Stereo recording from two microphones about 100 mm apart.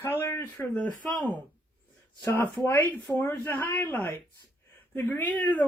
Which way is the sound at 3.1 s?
25° left (ahead or behind).